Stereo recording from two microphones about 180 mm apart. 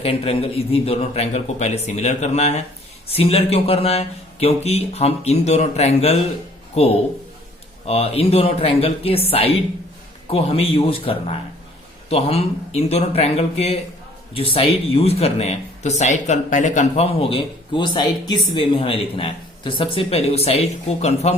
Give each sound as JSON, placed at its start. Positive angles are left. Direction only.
{"t": 0.0, "sound": "speech", "side_deg": 30}
{"t": 7.9, "sound": "speech", "side_deg": 35}